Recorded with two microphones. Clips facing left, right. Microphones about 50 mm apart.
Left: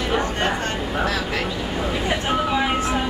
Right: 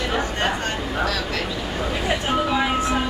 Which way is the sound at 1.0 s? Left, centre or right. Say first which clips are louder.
Left 1 dB; centre.